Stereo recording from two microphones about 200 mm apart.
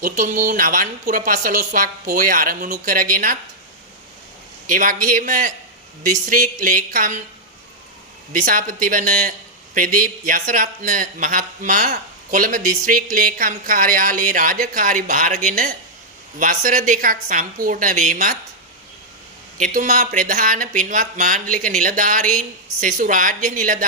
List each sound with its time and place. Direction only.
0.0 s speech: 40° right (ahead or behind)
4.7 s speech: 40° right (ahead or behind)
8.3 s speech: 40° right (ahead or behind)
19.7 s speech: 45° right (ahead or behind)